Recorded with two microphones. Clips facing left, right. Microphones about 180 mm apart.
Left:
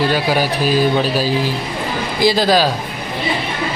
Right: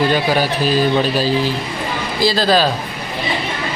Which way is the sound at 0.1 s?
10° left (ahead or behind).